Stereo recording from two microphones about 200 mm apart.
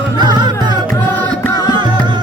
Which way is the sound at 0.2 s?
20° right (ahead or behind).